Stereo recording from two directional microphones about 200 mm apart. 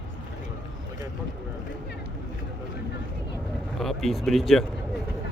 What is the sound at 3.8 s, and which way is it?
Speech, centre (ahead or behind).